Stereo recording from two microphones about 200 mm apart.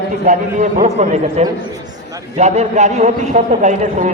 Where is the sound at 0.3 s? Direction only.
35° right (ahead or behind).